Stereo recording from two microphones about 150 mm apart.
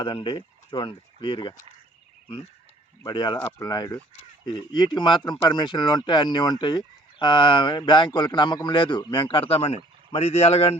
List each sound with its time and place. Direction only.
0.0 s speech: 30° left (ahead or behind)
3.0 s speech: 30° left (ahead or behind)
3.3 s speech: 15° left (ahead or behind)
3.7 s speech: 25° left (ahead or behind)